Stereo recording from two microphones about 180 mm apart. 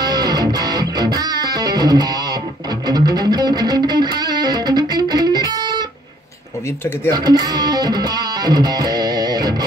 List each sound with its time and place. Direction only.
0.0 s music: 25° right (ahead or behind)
7.1 s speech: 20° right (ahead or behind)